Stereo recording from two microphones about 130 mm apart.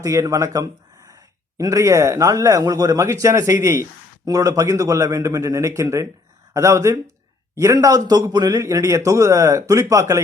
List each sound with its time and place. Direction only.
0.0 s speech: 25° right (ahead or behind)